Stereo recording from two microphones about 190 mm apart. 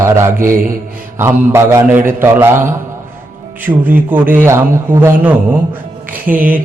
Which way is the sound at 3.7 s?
25° right (ahead or behind).